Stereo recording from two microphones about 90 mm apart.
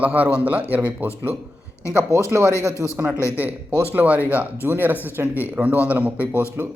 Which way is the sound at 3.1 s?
30° left (ahead or behind).